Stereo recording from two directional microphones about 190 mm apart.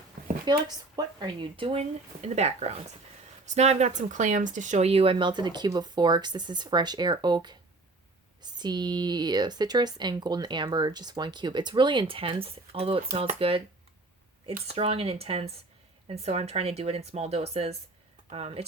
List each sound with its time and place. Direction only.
0.5 s speech: 20° right (ahead or behind)